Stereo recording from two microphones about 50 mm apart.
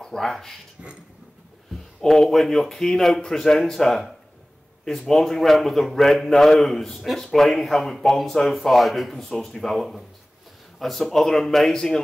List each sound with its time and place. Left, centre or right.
0.0 s speech: centre
0.8 s a sound: centre
2.0 s speech: centre